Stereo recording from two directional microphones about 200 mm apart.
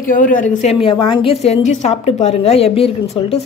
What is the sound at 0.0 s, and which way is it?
Speech, 40° left (ahead or behind).